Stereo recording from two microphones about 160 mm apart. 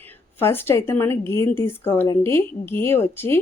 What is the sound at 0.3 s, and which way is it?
Speech, 15° left (ahead or behind).